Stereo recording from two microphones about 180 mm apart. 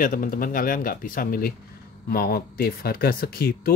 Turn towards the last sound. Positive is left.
turn(degrees=55)  # may be behind; listen again after turning